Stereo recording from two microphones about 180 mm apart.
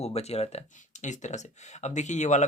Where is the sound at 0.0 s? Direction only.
35° left (ahead or behind).